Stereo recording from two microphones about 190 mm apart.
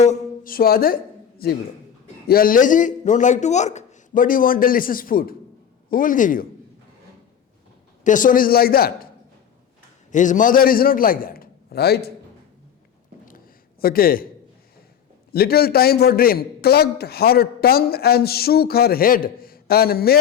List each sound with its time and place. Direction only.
0.0 s a man's voice: 40° left (ahead or behind)
8.0 s a man's voice: 45° left (ahead or behind)
10.1 s a man's voice: 40° left (ahead or behind)
13.8 s a man's voice: 50° left (ahead or behind)
15.3 s a man's voice: 55° left (ahead or behind)